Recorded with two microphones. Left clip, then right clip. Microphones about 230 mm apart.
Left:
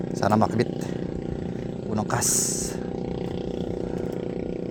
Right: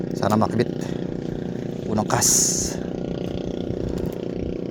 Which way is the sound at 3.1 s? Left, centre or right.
Right.